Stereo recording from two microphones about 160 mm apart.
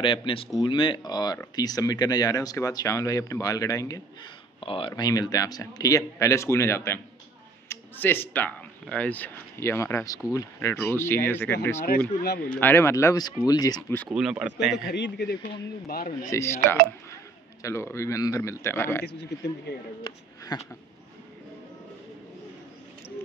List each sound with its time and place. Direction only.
0.0 s speech: 30° left (ahead or behind)
4.6 s speech: 35° left (ahead or behind)
14.0 s speech: 5° right (ahead or behind)
14.9 s a man's voice: 90° left
15.9 s speech: 65° left (ahead or behind)
16.3 s speech: 15° left (ahead or behind)